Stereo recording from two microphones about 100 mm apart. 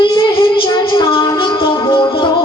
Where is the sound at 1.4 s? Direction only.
55° left (ahead or behind).